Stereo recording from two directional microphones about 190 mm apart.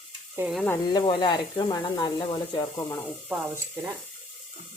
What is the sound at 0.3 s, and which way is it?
Sizzle, 5° right (ahead or behind).